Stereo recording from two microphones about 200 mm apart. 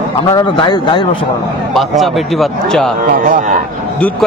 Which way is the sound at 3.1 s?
45° right (ahead or behind).